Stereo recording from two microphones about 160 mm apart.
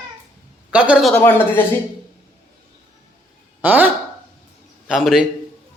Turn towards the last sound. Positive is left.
turn(degrees=0)  # may be behind; listen again after turning